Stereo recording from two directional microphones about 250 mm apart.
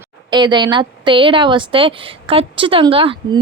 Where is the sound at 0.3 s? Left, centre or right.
Centre.